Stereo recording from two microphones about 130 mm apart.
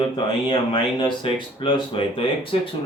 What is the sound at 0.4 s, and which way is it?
Speech, 40° left (ahead or behind).